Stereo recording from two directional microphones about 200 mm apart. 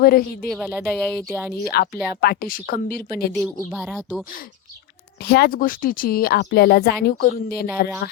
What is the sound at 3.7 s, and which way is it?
Speech, 5° right (ahead or behind).